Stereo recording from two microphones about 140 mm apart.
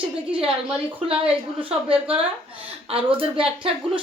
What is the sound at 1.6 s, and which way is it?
Speech, 40° right (ahead or behind).